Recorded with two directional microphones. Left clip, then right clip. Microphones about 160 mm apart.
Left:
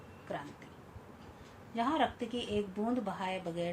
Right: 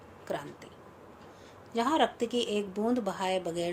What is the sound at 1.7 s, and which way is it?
Speech, 80° right.